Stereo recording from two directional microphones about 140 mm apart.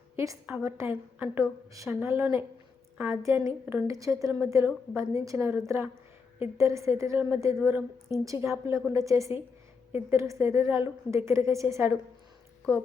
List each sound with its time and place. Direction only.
0.2 s a woman's voice: 20° right (ahead or behind)